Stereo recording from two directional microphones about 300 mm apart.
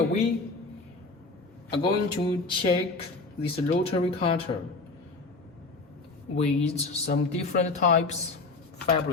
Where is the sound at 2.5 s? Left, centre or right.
Centre.